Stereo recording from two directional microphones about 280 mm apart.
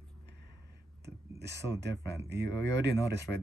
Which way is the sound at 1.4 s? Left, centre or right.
Right.